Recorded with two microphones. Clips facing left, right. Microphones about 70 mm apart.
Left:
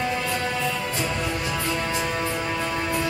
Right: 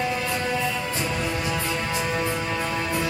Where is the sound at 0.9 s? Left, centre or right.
Centre.